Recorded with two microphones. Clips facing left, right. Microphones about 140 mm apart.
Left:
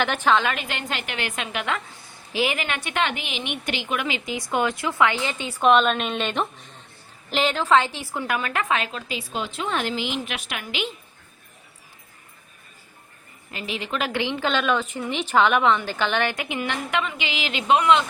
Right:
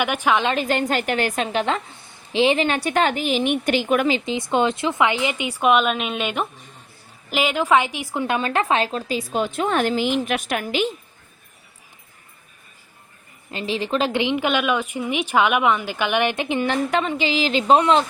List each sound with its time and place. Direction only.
0.0 s a woman's voice: 10° right (ahead or behind)
0.4 s a woman's voice: 35° right (ahead or behind)
4.4 s a woman's voice: 25° right (ahead or behind); by 10.9 s 45° right (ahead or behind)
13.5 s a woman's voice: 30° right (ahead or behind)